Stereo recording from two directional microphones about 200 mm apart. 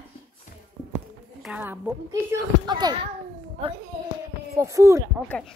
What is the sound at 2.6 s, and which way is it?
Speech, 20° right (ahead or behind).